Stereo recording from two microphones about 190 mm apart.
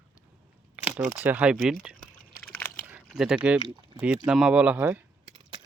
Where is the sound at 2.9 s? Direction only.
5° right (ahead or behind).